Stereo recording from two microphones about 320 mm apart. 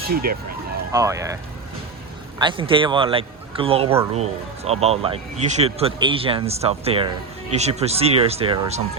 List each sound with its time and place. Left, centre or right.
0.1 s speech: right
0.9 s speech: centre
2.4 s speech: centre